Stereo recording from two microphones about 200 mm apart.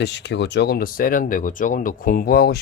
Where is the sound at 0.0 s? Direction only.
60° left (ahead or behind).